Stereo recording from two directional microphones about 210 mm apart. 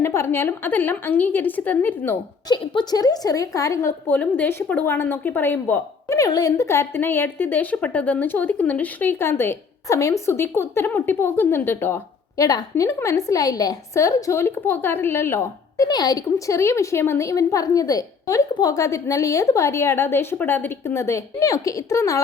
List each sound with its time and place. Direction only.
0.0 s a woman's voice: 10° left (ahead or behind)